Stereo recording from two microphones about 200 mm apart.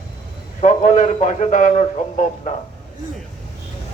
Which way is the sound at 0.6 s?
40° left (ahead or behind).